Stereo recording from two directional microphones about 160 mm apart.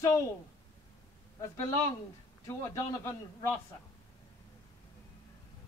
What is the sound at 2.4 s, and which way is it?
Speech, 15° left (ahead or behind).